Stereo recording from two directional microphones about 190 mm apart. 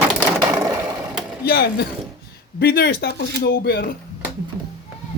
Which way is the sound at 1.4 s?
55° left (ahead or behind).